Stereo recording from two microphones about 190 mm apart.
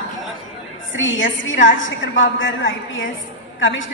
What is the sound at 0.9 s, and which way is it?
A woman's voice, 85° left.